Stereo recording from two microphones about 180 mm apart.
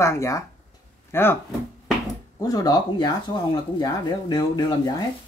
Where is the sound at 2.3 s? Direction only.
20° left (ahead or behind).